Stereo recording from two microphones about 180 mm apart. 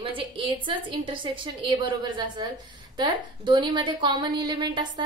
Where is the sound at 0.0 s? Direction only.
30° right (ahead or behind).